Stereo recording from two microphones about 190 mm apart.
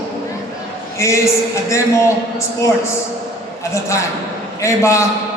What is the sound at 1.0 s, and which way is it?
Speech, 15° left (ahead or behind).